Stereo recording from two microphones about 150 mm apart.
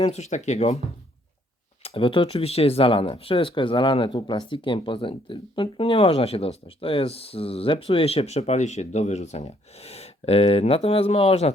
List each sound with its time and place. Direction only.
0.0 s speech: 45° left (ahead or behind)
1.8 s speech: 40° left (ahead or behind)